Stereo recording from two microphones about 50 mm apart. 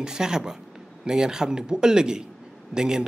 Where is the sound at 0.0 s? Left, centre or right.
Centre.